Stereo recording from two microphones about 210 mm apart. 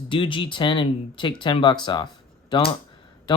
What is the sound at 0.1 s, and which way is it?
Speech, 25° left (ahead or behind).